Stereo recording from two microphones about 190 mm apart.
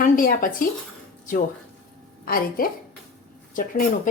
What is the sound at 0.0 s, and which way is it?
Speech, 45° left (ahead or behind).